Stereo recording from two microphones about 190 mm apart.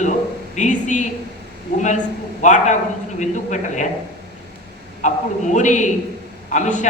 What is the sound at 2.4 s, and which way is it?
A man's voice, 40° left (ahead or behind).